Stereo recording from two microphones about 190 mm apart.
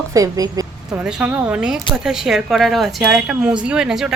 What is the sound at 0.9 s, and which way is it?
Speech, 5° right (ahead or behind).